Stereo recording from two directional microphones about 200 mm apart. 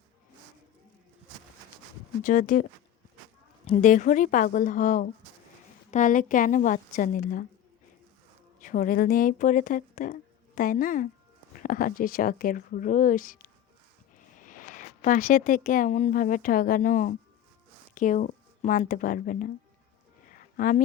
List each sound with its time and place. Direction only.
2.2 s a woman's voice: 40° left (ahead or behind)
3.7 s a woman's voice: 40° left (ahead or behind)
8.6 s speech: 40° left (ahead or behind)
20.4 s a sound: 45° left (ahead or behind)